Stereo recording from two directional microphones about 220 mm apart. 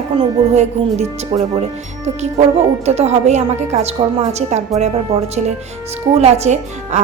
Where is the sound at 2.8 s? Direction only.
30° right (ahead or behind).